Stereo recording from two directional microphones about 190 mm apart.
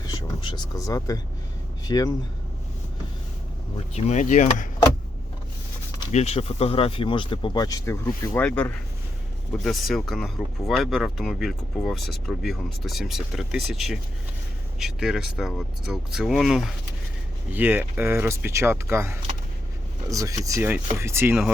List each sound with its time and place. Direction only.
0.1 s speech: 20° left (ahead or behind)
3.9 s speech: 35° left (ahead or behind)
6.1 s speech: 35° left (ahead or behind); by 8.4 s 20° left (ahead or behind)
8.4 s speech: 5° left (ahead or behind); by 21.5 s 10° right (ahead or behind)